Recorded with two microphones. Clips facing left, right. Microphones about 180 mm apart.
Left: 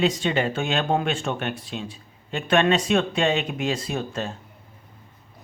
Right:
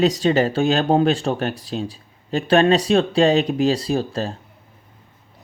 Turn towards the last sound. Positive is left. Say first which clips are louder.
# right 6 dB
turn(degrees=-35)  # may be behind; listen again after turning